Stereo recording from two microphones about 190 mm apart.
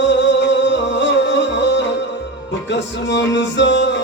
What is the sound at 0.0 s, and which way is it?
Music, 70° left (ahead or behind).